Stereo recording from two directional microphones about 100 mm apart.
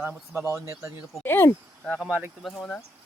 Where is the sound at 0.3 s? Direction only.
30° right (ahead or behind).